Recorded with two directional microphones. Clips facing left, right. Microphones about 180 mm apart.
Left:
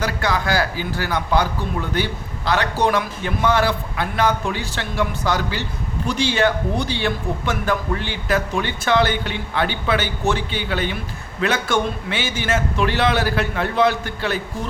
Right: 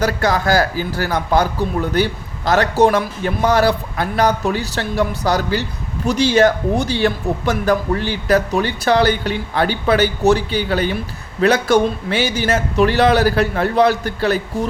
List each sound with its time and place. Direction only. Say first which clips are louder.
0.0 s speech: right 5 dB; 40° right (ahead or behind)